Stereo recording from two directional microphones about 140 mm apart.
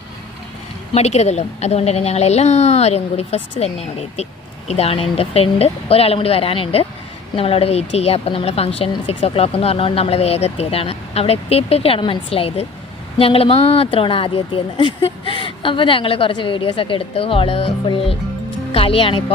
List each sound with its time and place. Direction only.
0.9 s a woman's voice: 50° left (ahead or behind)